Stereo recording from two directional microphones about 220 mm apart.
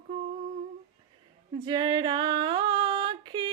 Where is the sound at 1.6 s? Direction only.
20° right (ahead or behind).